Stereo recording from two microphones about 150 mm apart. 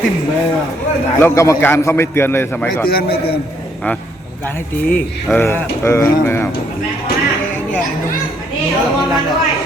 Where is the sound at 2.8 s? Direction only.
90° left.